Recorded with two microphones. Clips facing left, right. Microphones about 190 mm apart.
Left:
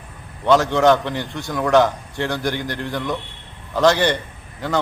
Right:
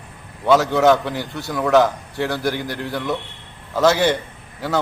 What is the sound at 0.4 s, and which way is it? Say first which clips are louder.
A man's voice: even; 5° right (ahead or behind).